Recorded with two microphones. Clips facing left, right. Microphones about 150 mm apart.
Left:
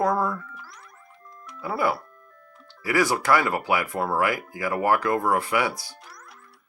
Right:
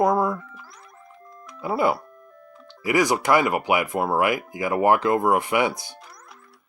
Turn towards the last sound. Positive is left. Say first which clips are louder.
# right 2 dB
turn(degrees=-20)  # may be behind; listen again after turning